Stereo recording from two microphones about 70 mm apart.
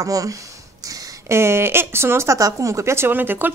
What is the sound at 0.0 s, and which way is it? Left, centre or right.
Speech, right.